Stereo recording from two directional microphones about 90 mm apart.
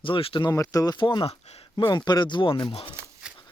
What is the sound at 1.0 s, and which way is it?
Speech, 65° left (ahead or behind).